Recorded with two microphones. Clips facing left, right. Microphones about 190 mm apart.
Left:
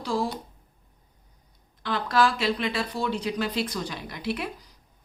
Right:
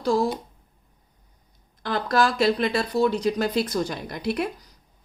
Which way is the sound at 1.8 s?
45° right (ahead or behind).